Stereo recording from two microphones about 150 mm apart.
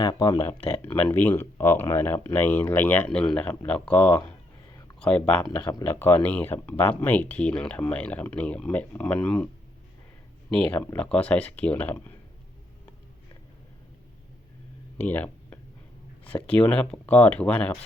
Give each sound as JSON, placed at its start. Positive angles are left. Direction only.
{"t": 0.0, "sound": "speech", "side_deg": 30}
{"t": 0.8, "sound": "speech", "side_deg": 10}
{"t": 5.5, "sound": "speech", "side_deg": 25}
{"t": 10.5, "sound": "speech", "side_deg": 10}
{"t": 14.9, "sound": "a sound", "side_deg": 10}
{"t": 16.2, "sound": "speech", "side_deg": 10}